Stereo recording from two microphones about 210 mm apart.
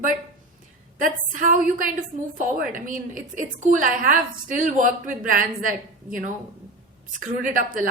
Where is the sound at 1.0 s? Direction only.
40° right (ahead or behind).